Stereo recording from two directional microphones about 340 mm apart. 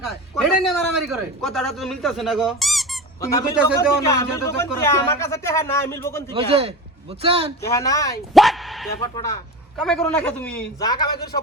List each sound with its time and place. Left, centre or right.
0.0 s a man's voice: centre
6.3 s a man's voice: centre
7.6 s speech: centre
9.1 s speech: centre
9.7 s a man's voice: centre